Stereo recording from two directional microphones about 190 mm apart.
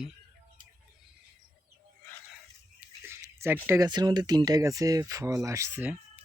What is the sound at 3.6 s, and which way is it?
Speech, 15° right (ahead or behind).